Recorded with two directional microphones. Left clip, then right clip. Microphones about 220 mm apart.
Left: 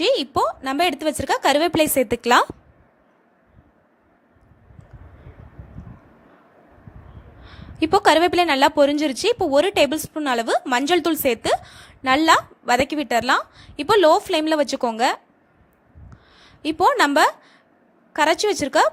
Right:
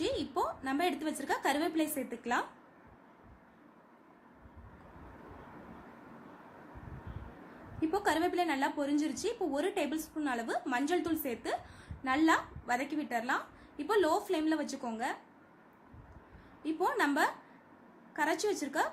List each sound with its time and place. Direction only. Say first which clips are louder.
0.0 s a woman's voice: left 15 dB; 40° left (ahead or behind)
7.8 s a woman's voice: left 16 dB; 40° left (ahead or behind)
16.6 s a woman's voice: left 14 dB; 40° left (ahead or behind)